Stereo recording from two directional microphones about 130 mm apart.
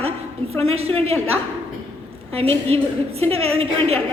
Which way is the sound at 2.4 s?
50° right (ahead or behind).